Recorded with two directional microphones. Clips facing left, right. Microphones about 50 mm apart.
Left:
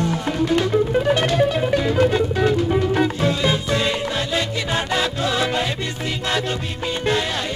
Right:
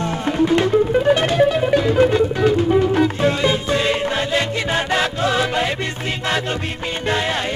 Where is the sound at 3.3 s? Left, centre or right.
Right.